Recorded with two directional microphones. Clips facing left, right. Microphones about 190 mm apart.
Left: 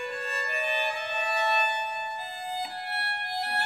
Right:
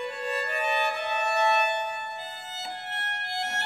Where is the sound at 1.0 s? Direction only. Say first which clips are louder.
Right 4 dB; 50° right (ahead or behind).